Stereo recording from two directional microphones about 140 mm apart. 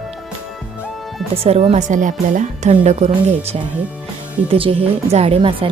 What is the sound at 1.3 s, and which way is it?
A woman's voice, 45° right (ahead or behind).